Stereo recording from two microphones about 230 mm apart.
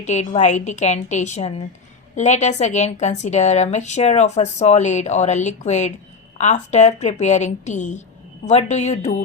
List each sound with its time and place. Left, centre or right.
0.0 s a woman's voice: left